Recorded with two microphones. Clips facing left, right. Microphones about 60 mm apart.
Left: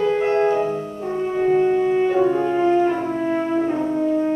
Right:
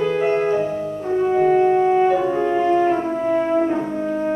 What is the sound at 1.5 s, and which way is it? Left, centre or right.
Music, right.